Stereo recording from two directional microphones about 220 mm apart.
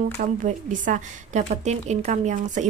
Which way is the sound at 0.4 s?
35° right (ahead or behind).